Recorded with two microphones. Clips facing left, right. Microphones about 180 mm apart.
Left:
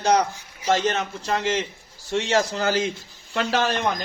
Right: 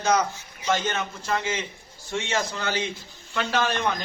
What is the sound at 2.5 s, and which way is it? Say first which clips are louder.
Speech: left 5 dB; 40° left (ahead or behind).